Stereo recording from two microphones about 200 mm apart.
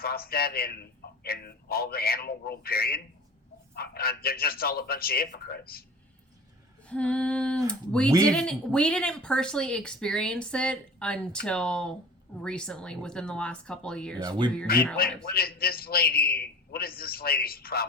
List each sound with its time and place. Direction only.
0.0 s a man's voice: 50° left (ahead or behind)
6.8 s speech: 5° left (ahead or behind)
14.3 s speech: 20° right (ahead or behind)
15.2 s a man's voice: 50° left (ahead or behind)